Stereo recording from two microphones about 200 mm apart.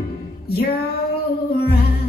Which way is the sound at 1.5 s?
55° left (ahead or behind).